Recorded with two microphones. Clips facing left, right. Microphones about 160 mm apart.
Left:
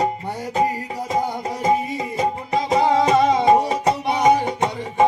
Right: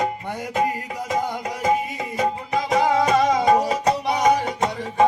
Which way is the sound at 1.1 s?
30° left (ahead or behind).